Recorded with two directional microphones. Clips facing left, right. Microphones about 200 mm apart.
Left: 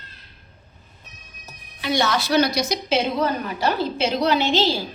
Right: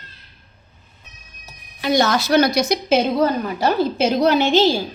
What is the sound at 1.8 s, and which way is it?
A woman's voice, 45° right (ahead or behind).